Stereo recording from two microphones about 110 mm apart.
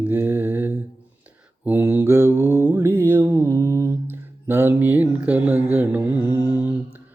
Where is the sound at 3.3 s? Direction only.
35° right (ahead or behind).